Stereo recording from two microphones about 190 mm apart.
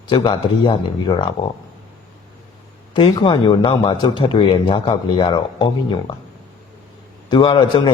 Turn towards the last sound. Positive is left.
turn(degrees=25)  # may be behind; listen again after turning